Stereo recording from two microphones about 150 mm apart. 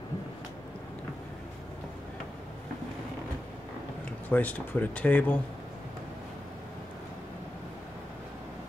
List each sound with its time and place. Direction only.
4.3 s speech: 10° left (ahead or behind)